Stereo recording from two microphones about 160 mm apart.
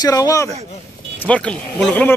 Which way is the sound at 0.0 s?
20° left (ahead or behind).